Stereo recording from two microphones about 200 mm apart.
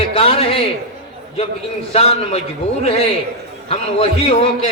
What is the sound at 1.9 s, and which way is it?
Speech, 30° left (ahead or behind).